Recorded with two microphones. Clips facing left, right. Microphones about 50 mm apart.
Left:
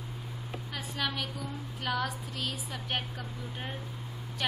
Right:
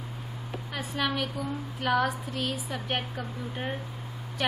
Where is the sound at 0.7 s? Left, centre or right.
Centre.